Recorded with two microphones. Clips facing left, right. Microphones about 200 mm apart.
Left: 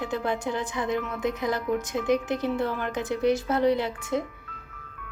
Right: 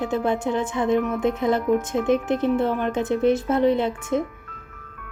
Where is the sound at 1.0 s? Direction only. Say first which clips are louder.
Right 6 dB; 50° right (ahead or behind).